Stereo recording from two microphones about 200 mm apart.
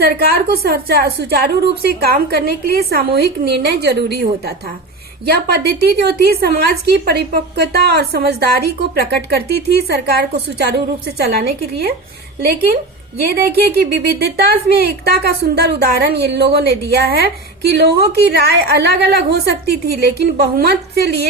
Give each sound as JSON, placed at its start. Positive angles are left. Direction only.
{"t": 0.0, "sound": "a woman's voice", "side_deg": -50}